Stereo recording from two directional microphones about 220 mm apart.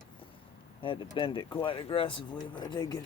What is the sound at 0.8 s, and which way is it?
Speech, 25° left (ahead or behind).